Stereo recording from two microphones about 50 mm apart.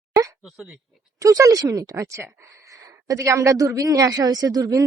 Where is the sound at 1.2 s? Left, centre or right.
Right.